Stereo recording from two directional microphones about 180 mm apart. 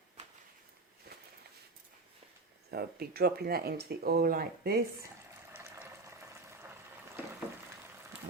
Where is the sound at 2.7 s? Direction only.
60° right (ahead or behind).